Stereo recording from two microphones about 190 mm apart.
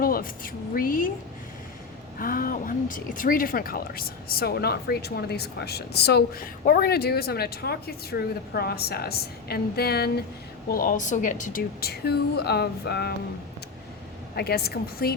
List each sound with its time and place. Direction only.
0.0 s speech: 50° left (ahead or behind)
2.1 s a woman's voice: 50° left (ahead or behind)
14.3 s speech: 55° left (ahead or behind)